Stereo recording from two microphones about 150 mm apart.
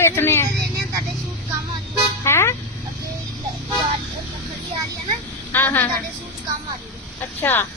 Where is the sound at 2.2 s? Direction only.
15° left (ahead or behind).